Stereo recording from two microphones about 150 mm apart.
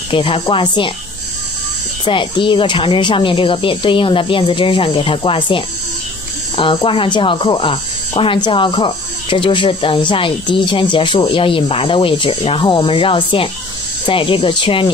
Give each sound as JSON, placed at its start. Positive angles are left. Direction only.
{"t": 0.1, "sound": "speech", "side_deg": 35}
{"t": 2.0, "sound": "speech", "side_deg": 35}